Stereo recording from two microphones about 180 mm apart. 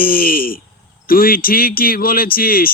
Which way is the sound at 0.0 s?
55° left (ahead or behind).